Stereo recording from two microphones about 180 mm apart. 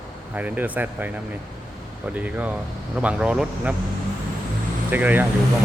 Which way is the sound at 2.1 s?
10° right (ahead or behind).